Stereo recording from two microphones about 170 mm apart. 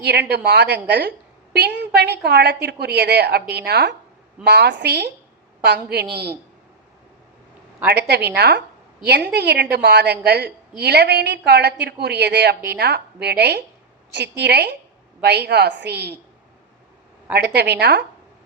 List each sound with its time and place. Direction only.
0.0 s a woman's voice: 80° right
7.9 s a woman's voice: 75° right (ahead or behind)
17.3 s a woman's voice: 75° right (ahead or behind)